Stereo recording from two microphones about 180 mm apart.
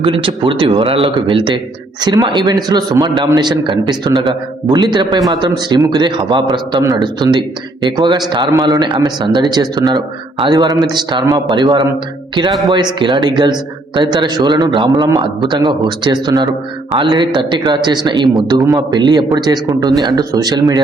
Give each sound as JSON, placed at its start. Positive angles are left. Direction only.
{"t": 0.0, "sound": "a man's voice", "side_deg": -30}